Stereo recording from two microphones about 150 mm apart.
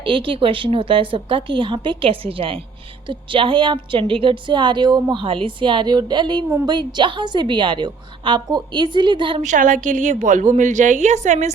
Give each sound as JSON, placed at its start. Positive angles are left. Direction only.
{"t": 0.0, "sound": "a woman's voice", "side_deg": -35}
{"t": 9.4, "sound": "a woman's voice", "side_deg": -55}